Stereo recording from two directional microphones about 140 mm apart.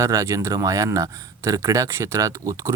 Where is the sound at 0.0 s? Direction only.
20° right (ahead or behind).